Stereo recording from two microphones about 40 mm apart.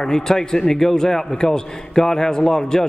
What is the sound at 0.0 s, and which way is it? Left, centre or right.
A man's voice, centre.